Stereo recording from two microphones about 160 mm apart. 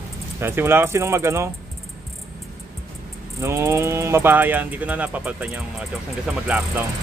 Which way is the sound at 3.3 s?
15° right (ahead or behind).